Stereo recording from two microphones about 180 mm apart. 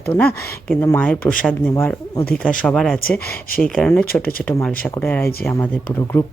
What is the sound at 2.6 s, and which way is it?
Speech, centre (ahead or behind).